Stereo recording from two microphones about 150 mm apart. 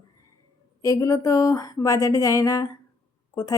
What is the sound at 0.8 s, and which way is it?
Speech, 20° left (ahead or behind).